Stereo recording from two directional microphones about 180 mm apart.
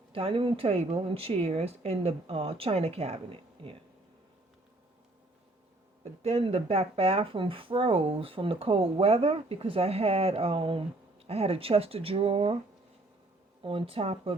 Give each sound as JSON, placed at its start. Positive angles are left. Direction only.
{"t": 0.1, "sound": "speech", "side_deg": -30}
{"t": 6.2, "sound": "speech", "side_deg": -35}
{"t": 13.6, "sound": "speech", "side_deg": -30}